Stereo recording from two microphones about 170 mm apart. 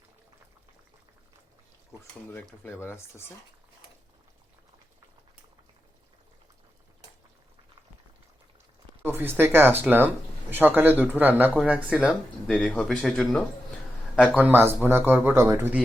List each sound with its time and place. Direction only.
2.6 s speech: 15° left (ahead or behind)
9.0 s speech: 15° right (ahead or behind); by 13.4 s 5° left (ahead or behind)
14.3 s speech: 10° right (ahead or behind)